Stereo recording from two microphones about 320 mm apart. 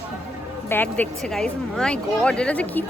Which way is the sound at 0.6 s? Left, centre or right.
Centre.